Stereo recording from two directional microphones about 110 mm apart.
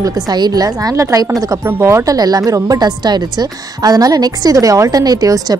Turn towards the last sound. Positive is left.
turn(degrees=-35)  # may be behind; listen again after turning